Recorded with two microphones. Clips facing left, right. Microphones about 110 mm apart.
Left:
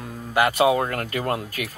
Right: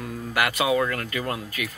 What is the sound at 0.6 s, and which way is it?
Speech, 40° left (ahead or behind).